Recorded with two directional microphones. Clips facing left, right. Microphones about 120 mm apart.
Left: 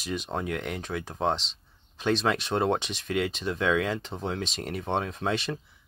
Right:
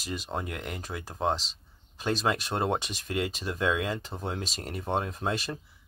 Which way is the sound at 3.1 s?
60° left (ahead or behind).